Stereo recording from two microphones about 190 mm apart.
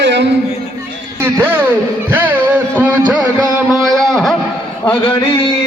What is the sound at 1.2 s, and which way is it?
Music, 10° right (ahead or behind).